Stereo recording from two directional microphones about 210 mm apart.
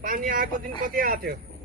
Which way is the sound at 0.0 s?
45° right (ahead or behind).